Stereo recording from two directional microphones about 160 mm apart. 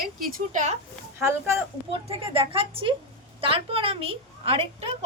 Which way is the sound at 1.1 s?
15° right (ahead or behind).